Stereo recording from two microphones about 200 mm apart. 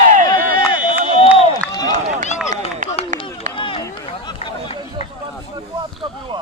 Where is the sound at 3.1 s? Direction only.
40° right (ahead or behind).